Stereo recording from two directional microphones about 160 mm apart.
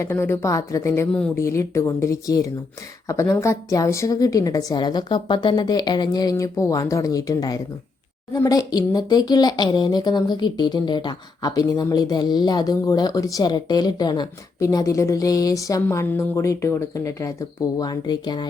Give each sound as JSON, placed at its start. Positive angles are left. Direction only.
{"t": 0.0, "sound": "speech", "side_deg": 15}